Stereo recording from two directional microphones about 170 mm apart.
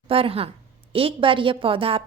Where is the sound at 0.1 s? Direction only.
35° right (ahead or behind).